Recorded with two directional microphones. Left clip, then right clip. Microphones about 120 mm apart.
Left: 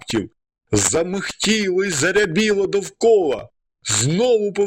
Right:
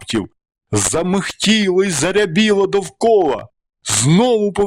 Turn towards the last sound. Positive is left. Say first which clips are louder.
# right 2 dB
turn(degrees=-40)  # may be behind; listen again after turning